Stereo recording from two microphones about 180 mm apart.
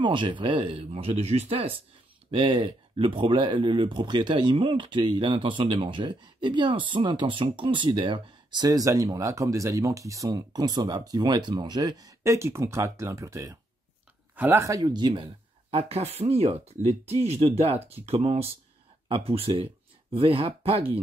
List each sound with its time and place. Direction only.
0.0 s speech: 25° right (ahead or behind)
15.7 s speech: 35° right (ahead or behind)